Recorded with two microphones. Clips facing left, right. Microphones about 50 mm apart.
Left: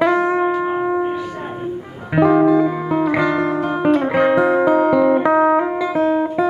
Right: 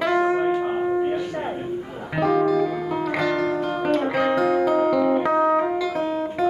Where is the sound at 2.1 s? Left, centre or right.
Centre.